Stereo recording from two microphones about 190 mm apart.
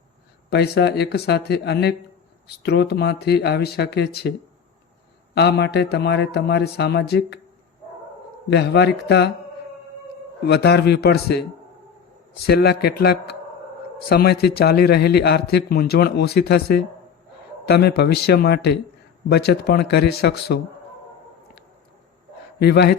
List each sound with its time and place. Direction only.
0.5 s a man's voice: 60° left (ahead or behind)
8.4 s a man's voice: 60° left (ahead or behind)
10.4 s a man's voice: 60° left (ahead or behind)
12.5 s a man's voice: 55° left (ahead or behind)
22.5 s a man's voice: 60° left (ahead or behind)